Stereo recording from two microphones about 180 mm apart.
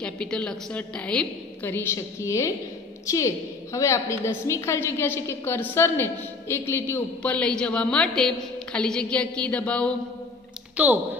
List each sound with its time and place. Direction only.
0.0 s a woman's voice: 5° left (ahead or behind)
10.8 s speech: 10° right (ahead or behind)